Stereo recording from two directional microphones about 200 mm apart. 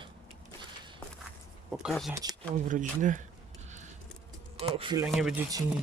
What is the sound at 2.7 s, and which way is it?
Speech, 40° right (ahead or behind).